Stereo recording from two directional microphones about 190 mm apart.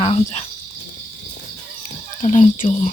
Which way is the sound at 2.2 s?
40° left (ahead or behind).